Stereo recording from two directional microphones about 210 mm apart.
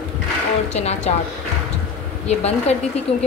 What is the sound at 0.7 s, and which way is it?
Speech, 30° left (ahead or behind).